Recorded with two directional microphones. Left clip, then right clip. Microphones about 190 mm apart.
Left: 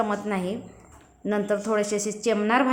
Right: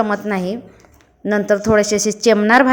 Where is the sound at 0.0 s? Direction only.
35° right (ahead or behind).